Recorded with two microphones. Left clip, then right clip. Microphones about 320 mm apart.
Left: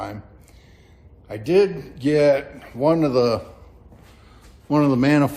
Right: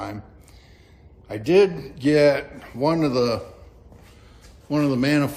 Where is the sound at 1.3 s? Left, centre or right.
Centre.